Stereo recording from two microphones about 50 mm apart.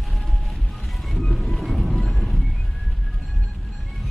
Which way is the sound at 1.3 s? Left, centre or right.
Centre.